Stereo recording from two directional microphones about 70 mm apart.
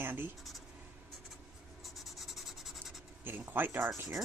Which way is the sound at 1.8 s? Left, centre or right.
Centre.